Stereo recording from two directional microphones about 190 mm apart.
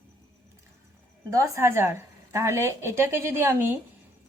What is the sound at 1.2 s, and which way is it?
A woman's voice, 15° right (ahead or behind).